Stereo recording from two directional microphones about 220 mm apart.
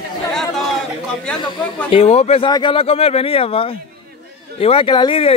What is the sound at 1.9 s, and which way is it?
Speech, 30° left (ahead or behind).